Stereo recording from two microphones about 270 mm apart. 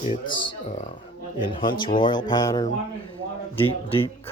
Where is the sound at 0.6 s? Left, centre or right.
Left.